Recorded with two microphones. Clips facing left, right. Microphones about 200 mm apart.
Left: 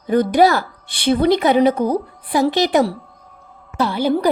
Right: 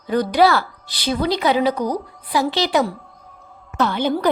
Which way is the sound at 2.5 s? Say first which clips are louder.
Left 3 dB; 45° left (ahead or behind).